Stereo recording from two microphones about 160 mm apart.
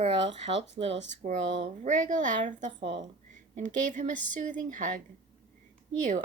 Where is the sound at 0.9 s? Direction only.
90° right.